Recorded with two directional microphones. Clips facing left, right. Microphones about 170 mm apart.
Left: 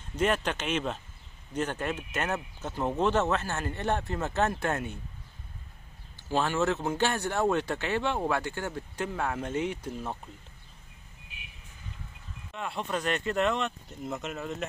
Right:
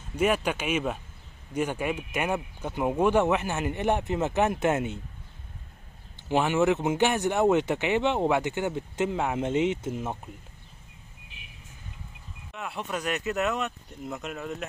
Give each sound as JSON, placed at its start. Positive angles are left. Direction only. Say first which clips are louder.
{"t": 0.1, "sound": "speech", "louder": "right 3 dB", "side_deg": -10}
{"t": 6.2, "sound": "speech", "louder": "right 4 dB", "side_deg": -15}
{"t": 12.5, "sound": "speech", "louder": "left 1 dB", "side_deg": -5}